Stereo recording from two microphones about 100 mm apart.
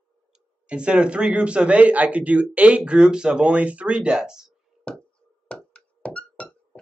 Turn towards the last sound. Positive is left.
turn(degrees=10)  # may be behind; listen again after turning